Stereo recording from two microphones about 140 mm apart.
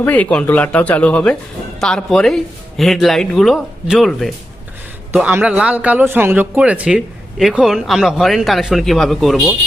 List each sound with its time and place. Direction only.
0.0 s speech: 10° left (ahead or behind)
5.1 s speech: 10° right (ahead or behind)